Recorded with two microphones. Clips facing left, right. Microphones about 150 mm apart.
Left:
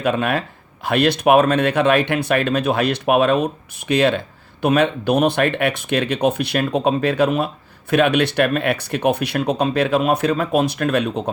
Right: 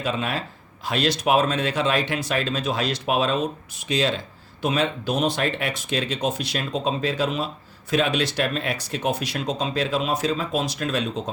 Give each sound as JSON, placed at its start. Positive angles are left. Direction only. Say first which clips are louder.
{"t": 0.0, "sound": "speech", "louder": "left 7 dB", "side_deg": 60}